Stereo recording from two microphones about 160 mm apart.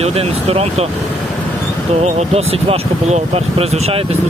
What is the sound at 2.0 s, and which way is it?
Speech, 40° right (ahead or behind).